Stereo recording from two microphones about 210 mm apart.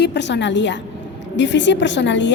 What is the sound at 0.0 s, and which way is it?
A woman's voice, 55° left (ahead or behind).